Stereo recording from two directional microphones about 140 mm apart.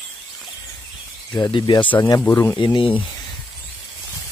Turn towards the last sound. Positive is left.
turn(degrees=35)  # may be behind; listen again after turning